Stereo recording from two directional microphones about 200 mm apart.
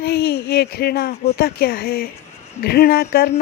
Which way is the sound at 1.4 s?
50° left (ahead or behind).